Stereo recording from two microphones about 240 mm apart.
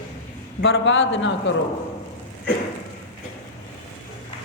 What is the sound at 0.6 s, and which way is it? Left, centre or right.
Speech, left.